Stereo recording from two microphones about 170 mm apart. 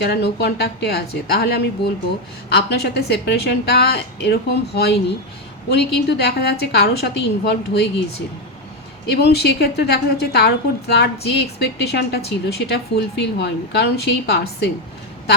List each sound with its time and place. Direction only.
0.0 s a woman's voice: 75° left (ahead or behind)
9.2 s a woman's voice: 75° left (ahead or behind)